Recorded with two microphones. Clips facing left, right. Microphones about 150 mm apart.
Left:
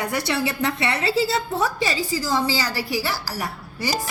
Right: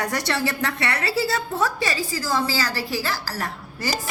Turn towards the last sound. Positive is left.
turn(degrees=10)  # may be behind; listen again after turning